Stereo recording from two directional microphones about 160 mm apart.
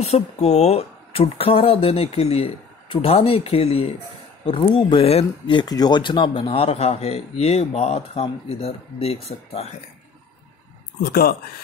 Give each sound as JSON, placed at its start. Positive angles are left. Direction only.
{"t": 0.0, "sound": "speech", "side_deg": 40}
{"t": 11.0, "sound": "speech", "side_deg": 70}